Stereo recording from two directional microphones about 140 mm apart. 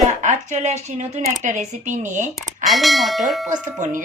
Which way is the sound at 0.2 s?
55° right (ahead or behind).